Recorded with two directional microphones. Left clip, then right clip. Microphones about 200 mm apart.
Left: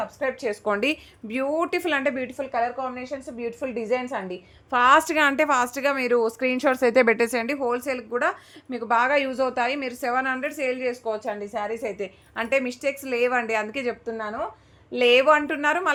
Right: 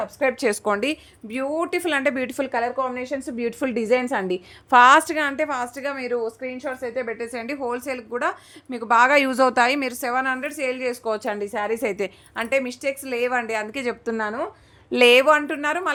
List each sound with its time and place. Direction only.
0.0 s a woman's voice: 50° right (ahead or behind)
0.8 s a woman's voice: centre (ahead or behind)
2.3 s a woman's voice: 50° right (ahead or behind)
4.7 s a woman's voice: 25° right (ahead or behind)
5.0 s a woman's voice: 10° left (ahead or behind); by 6.3 s 30° left (ahead or behind)
6.4 s a woman's voice: 55° left (ahead or behind)
7.3 s a woman's voice: 10° left (ahead or behind)
8.7 s a woman's voice: 15° right (ahead or behind)
10.0 s a woman's voice: 10° right (ahead or behind)
11.0 s a woman's voice: 40° right (ahead or behind)
12.4 s a woman's voice: centre (ahead or behind)
14.0 s a woman's voice: 40° right (ahead or behind)
15.3 s a woman's voice: 5° right (ahead or behind)